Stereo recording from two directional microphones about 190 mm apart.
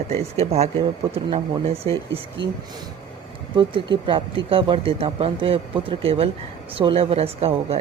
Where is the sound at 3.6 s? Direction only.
25° right (ahead or behind).